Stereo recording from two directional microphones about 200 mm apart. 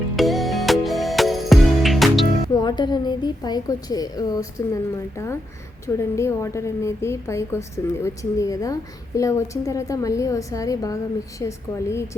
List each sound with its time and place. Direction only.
0.2 s music: centre (ahead or behind)
2.5 s a woman's voice: 20° left (ahead or behind)